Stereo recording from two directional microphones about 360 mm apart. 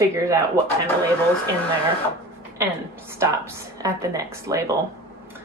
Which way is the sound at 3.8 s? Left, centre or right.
Centre.